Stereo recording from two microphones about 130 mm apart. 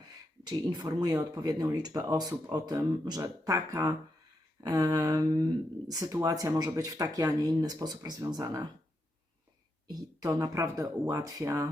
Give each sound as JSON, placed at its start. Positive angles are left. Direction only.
{"t": 0.4, "sound": "speech", "side_deg": -35}
{"t": 9.8, "sound": "speech", "side_deg": -30}